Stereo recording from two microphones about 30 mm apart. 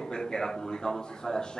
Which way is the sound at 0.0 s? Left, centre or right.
Left.